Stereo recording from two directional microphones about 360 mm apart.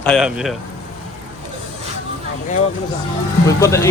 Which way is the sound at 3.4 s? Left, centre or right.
Centre.